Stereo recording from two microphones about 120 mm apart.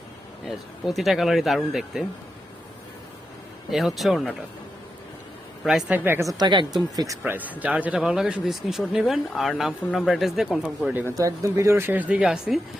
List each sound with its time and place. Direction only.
0.4 s speech: centre (ahead or behind)
3.7 s speech: centre (ahead or behind)
5.9 s speech: 20° right (ahead or behind)
6.3 s a woman's voice: 40° right (ahead or behind)
7.3 s speech: 15° right (ahead or behind)
11.1 s speech: 25° right (ahead or behind); by 12.5 s 5° right (ahead or behind)